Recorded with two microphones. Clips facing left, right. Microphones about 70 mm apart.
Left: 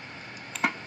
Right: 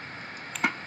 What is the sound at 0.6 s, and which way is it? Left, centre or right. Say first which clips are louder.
Tick-tock: even; centre.